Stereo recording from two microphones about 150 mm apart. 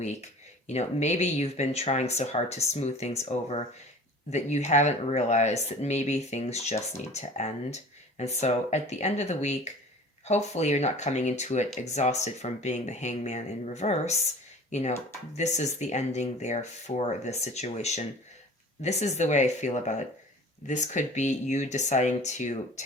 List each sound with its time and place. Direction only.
0.7 s speech: 45° left (ahead or behind)